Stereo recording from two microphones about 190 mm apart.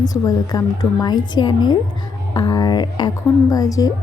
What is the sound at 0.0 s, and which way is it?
A woman's voice, 20° left (ahead or behind).